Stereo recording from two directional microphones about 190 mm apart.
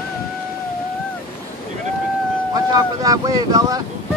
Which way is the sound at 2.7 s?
20° right (ahead or behind).